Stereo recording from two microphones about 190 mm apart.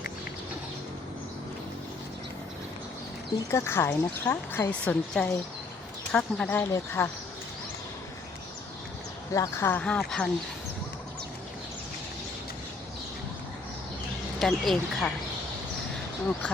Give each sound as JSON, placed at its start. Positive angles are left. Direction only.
{"t": 3.5, "sound": "a woman's voice", "side_deg": 15}
{"t": 9.3, "sound": "a woman's voice", "side_deg": 15}
{"t": 14.3, "sound": "speech", "side_deg": 0}